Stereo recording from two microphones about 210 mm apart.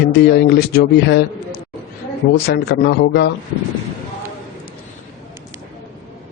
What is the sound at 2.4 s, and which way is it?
Speech, 50° left (ahead or behind).